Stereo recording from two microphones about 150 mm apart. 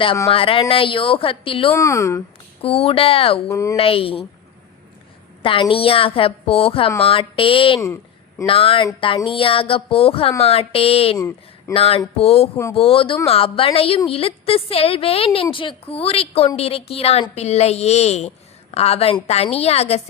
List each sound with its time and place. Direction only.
0.3 s a woman's voice: 40° left (ahead or behind)
1.7 s speech: 20° left (ahead or behind)
2.6 s a woman's voice: 40° left (ahead or behind)
3.5 s speech: 20° left (ahead or behind)
3.8 s a woman's voice: 40° left (ahead or behind)
5.4 s a woman's voice: 35° left (ahead or behind)